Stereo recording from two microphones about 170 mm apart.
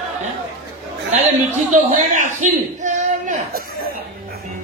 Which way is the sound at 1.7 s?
45° right (ahead or behind).